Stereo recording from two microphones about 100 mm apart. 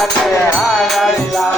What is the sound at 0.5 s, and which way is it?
Music, centre (ahead or behind).